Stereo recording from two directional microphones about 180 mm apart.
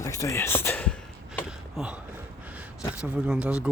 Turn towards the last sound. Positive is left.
turn(degrees=-5)  # may be behind; listen again after turning